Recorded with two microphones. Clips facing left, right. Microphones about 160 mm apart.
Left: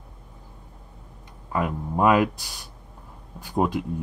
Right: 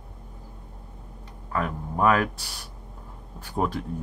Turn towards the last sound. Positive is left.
turn(degrees=15)  # may be behind; listen again after turning